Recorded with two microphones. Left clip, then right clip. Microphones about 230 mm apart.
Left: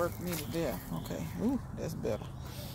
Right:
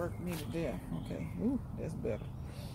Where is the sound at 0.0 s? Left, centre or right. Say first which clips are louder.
Left 5 dB; left.